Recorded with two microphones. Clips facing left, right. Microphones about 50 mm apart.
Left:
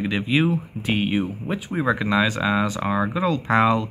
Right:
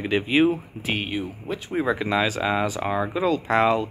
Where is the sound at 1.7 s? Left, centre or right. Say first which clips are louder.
Left 1 dB; centre.